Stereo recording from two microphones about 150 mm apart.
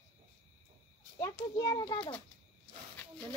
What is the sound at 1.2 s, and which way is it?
Speech, 25° left (ahead or behind).